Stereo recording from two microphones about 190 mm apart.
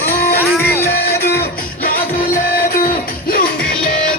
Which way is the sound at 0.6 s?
15° left (ahead or behind).